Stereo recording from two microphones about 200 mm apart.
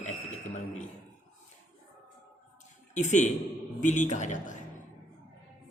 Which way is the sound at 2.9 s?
35° left (ahead or behind).